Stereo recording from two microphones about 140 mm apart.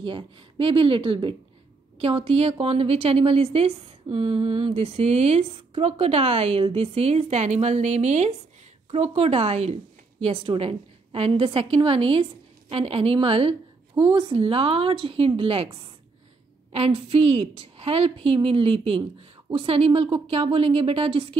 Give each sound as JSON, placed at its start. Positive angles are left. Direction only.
{"t": 0.0, "sound": "a woman's voice", "side_deg": -40}